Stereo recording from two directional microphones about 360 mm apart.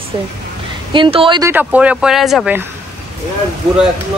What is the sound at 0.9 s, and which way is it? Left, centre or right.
Speech, centre.